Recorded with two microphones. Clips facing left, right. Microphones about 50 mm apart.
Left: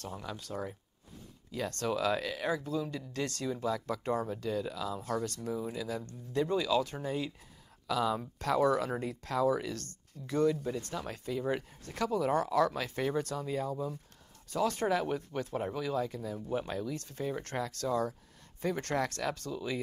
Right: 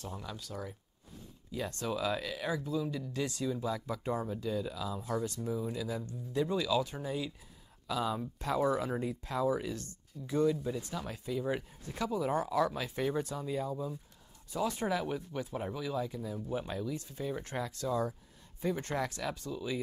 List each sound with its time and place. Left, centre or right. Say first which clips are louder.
0.2 s speech: left 3 dB; left
1.5 s speech: left 2 dB; left
7.8 s speech: left 3 dB; left
17.5 s speech: left 2 dB; centre
17.8 s speech: left 1 dB; left